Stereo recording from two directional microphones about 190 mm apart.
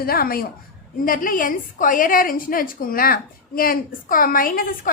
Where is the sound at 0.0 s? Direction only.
50° left (ahead or behind).